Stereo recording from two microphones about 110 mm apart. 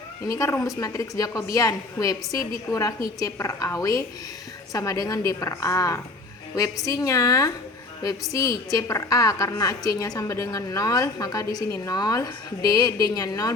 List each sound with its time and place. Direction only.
0.3 s a woman's voice: 30° left (ahead or behind)